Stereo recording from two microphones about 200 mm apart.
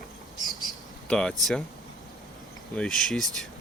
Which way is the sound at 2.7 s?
Centre (ahead or behind).